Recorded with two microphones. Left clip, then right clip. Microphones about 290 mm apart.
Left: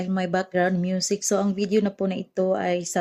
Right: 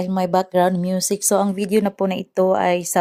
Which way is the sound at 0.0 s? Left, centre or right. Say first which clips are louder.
Right 6 dB; centre.